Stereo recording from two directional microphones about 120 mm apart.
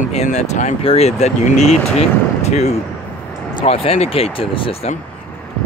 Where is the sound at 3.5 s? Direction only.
55° left (ahead or behind).